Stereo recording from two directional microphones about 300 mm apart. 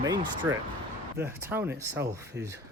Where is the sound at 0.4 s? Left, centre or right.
Centre.